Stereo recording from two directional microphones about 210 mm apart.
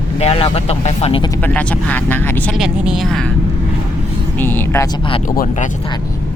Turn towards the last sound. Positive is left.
turn(degrees=40)  # may be behind; listen again after turning